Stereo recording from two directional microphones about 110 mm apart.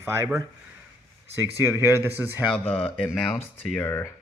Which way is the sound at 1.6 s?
25° right (ahead or behind).